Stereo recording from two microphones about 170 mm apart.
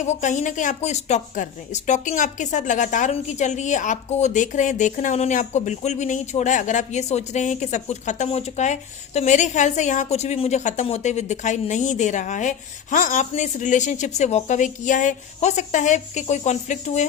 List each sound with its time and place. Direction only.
0.0 s a woman's voice: 45° left (ahead or behind)